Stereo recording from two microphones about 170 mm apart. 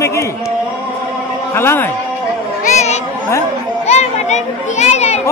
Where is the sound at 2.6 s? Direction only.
45° left (ahead or behind).